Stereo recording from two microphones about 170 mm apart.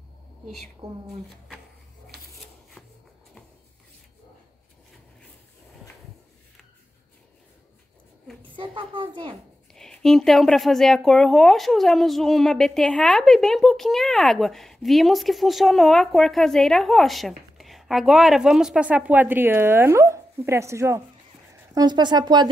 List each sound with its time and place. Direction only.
8.4 s a woman's voice: 30° right (ahead or behind)
9.8 s speech: centre (ahead or behind); by 22.5 s 25° right (ahead or behind)